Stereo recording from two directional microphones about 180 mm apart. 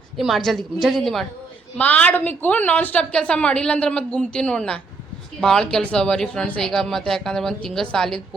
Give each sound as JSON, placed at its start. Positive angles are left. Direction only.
{"t": 0.2, "sound": "a woman's voice", "side_deg": 0}